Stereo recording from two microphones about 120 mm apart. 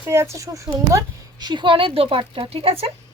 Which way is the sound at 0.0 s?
20° right (ahead or behind).